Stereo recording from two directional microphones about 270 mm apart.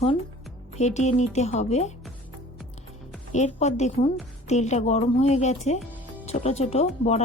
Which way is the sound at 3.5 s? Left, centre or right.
Left.